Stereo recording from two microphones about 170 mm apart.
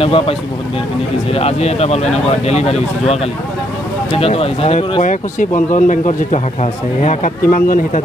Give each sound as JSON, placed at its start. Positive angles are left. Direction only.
{"t": 0.0, "sound": "speech", "side_deg": 35}
{"t": 5.0, "sound": "speech", "side_deg": 50}